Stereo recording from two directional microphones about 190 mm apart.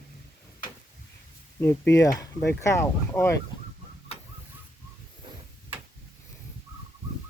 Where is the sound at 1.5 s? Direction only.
10° left (ahead or behind).